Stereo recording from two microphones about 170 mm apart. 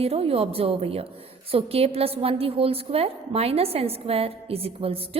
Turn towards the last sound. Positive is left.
turn(degrees=-35)  # may be behind; listen again after turning